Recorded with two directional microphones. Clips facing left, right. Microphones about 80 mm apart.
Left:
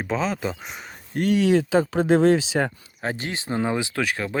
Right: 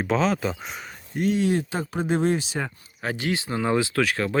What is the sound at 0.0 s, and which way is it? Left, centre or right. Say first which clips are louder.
Speech: right 2 dB; centre.